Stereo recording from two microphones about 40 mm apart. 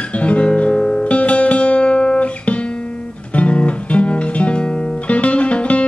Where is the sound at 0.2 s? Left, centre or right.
Left.